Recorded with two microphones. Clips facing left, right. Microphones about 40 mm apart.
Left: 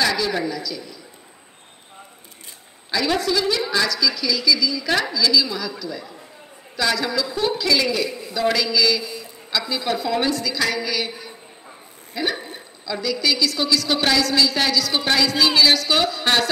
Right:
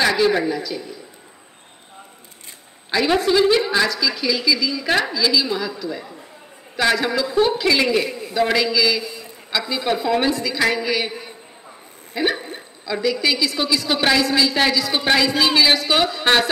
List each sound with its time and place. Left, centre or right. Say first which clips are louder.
0.0 s a man's voice: right 4 dB; right
2.9 s a woman's voice: right 4 dB; right
8.7 s a man's voice: right 1 dB; centre
12.1 s a sound: right 3 dB; right
12.8 s a woman's voice: right 3 dB; right